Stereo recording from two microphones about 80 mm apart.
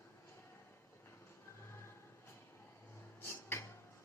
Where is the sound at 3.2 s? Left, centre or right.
Left.